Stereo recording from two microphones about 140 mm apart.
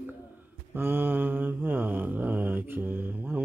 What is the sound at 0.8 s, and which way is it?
Mantra, 15° right (ahead or behind).